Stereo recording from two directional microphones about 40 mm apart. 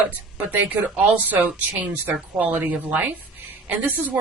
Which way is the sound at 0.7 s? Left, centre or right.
Right.